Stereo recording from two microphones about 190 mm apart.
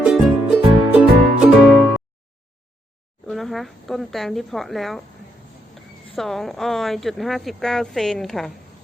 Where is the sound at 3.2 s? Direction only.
Centre (ahead or behind).